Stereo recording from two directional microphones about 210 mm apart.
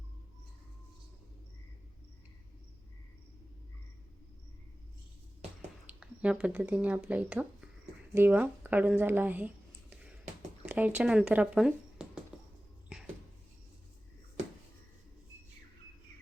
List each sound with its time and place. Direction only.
5.8 s speech: 5° right (ahead or behind)
10.7 s speech: 10° right (ahead or behind)